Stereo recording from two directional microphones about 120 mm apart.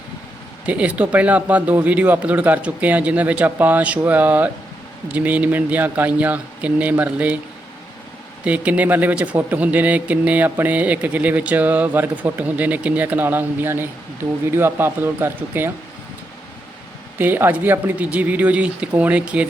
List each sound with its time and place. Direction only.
0.6 s speech: 10° right (ahead or behind)
8.4 s speech: 10° right (ahead or behind)
17.2 s speech: 15° right (ahead or behind)